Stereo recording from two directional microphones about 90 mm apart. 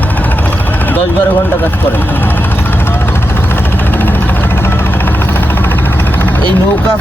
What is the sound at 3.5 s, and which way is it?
Music, 20° left (ahead or behind).